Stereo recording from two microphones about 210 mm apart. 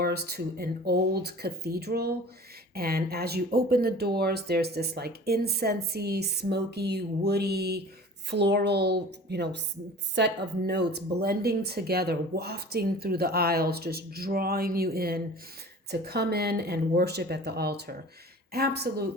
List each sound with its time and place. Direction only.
0.0 s speech: 50° right (ahead or behind)